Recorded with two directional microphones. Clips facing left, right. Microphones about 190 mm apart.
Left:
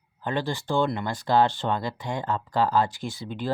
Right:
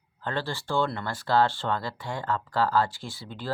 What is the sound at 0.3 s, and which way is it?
Speech, 15° left (ahead or behind).